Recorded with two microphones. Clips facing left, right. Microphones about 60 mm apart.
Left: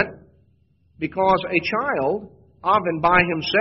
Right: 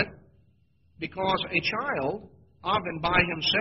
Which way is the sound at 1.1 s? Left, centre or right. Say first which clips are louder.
Left 9 dB; left.